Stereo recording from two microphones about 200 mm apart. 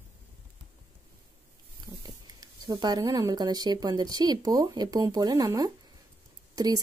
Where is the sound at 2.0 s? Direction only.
20° right (ahead or behind).